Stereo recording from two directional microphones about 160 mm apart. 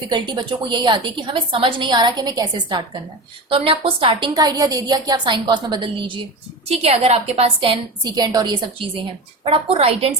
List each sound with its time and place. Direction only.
0.1 s a woman's voice: 30° right (ahead or behind)
6.7 s a woman's voice: 40° right (ahead or behind)